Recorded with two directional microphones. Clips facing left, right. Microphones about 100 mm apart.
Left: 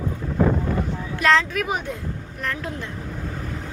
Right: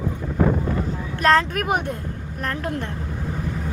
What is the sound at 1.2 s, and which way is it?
Speech, 50° right (ahead or behind).